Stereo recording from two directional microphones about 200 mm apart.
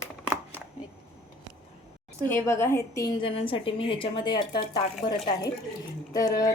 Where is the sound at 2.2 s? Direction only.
10° left (ahead or behind).